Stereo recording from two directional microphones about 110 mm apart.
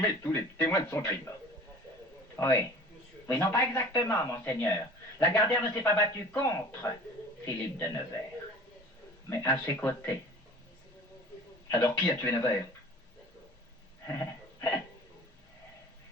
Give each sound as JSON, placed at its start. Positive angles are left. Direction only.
{"t": 0.0, "sound": "speech", "side_deg": 25}
{"t": 2.3, "sound": "speech", "side_deg": 25}
{"t": 9.3, "sound": "speech", "side_deg": 25}
{"t": 11.7, "sound": "speech", "side_deg": 20}
{"t": 14.1, "sound": "a sound", "side_deg": 25}